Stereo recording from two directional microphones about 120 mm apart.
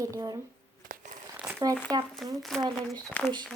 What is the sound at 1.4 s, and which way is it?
Crumpling, 10° right (ahead or behind).